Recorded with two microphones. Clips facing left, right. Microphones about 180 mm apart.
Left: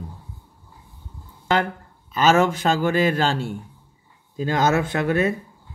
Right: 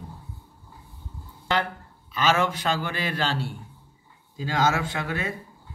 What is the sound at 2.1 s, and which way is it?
Speech, 45° left (ahead or behind).